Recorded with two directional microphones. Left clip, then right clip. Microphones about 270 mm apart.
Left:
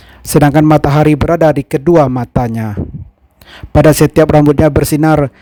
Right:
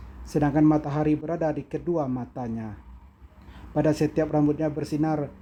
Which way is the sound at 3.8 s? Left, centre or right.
Left.